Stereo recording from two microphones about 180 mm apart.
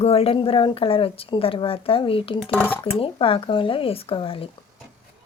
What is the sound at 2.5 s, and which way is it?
Speech, 10° left (ahead or behind).